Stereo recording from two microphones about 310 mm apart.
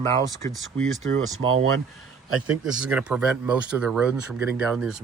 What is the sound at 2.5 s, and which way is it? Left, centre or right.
Speech, centre.